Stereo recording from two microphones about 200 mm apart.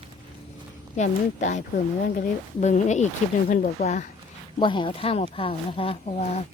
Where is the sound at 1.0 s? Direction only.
35° left (ahead or behind).